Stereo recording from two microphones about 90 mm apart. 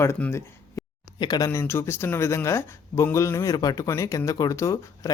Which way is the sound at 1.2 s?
50° left (ahead or behind).